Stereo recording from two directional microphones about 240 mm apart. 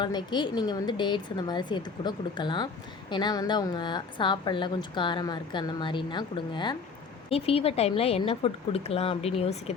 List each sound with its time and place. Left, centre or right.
0.0 s a woman's voice: centre